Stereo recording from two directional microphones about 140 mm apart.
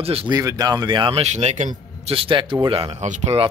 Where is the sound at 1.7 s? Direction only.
40° right (ahead or behind); by 3.4 s 55° right (ahead or behind).